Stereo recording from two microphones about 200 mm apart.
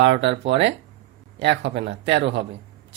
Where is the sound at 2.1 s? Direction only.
60° right (ahead or behind).